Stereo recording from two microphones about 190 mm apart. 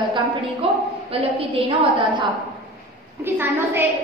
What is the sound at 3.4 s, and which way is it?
Speech, 10° right (ahead or behind).